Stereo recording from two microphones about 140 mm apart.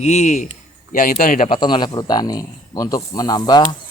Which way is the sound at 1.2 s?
80° left.